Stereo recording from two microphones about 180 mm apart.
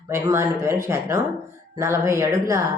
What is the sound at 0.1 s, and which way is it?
Speech, 15° right (ahead or behind).